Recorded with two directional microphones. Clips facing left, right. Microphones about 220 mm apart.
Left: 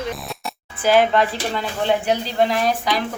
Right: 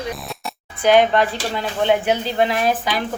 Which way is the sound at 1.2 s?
25° left (ahead or behind).